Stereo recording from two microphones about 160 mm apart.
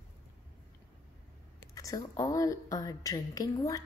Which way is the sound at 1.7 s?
20° left (ahead or behind).